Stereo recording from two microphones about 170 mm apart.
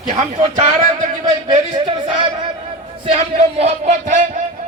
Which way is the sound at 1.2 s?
25° right (ahead or behind).